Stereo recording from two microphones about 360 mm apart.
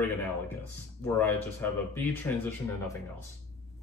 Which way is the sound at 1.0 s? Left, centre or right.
Centre.